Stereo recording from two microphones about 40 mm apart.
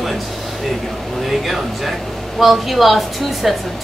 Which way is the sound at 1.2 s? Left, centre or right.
Centre.